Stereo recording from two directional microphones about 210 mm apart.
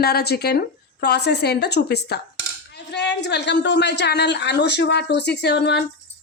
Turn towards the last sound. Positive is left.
turn(degrees=55)  # may be behind; listen again after turning